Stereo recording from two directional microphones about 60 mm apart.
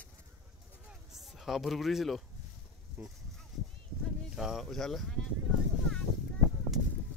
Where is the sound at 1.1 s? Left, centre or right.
Centre.